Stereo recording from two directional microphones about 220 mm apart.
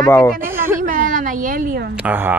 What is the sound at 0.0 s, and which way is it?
Speech, 10° left (ahead or behind).